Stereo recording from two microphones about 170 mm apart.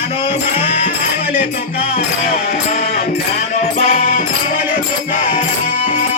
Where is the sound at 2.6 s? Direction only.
40° left (ahead or behind).